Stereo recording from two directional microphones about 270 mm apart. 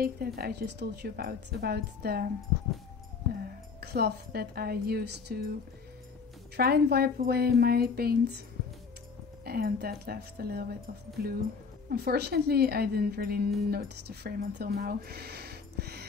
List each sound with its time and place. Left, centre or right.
0.0 s a woman's voice: right
3.8 s a woman's voice: right
6.5 s a woman's voice: right
9.4 s a woman's voice: right